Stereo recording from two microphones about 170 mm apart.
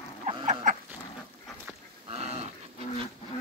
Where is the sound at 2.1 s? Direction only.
35° right (ahead or behind).